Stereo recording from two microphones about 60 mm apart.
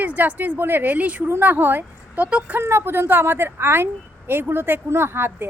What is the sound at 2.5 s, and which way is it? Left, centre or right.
Speech, right.